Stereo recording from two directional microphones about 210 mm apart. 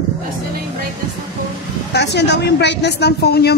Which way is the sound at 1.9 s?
55° left (ahead or behind).